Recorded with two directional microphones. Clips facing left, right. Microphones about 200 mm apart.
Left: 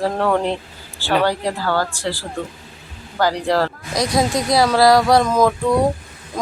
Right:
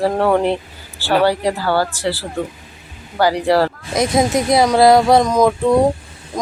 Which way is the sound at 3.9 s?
25° right (ahead or behind).